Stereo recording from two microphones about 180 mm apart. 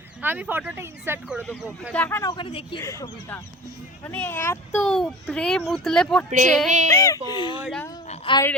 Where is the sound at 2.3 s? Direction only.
30° left (ahead or behind); by 4.8 s 15° left (ahead or behind).